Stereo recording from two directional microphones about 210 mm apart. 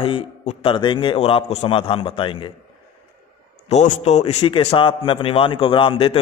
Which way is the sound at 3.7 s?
35° left (ahead or behind).